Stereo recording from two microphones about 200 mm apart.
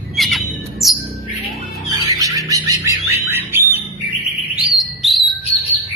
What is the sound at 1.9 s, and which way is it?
Music, 20° right (ahead or behind).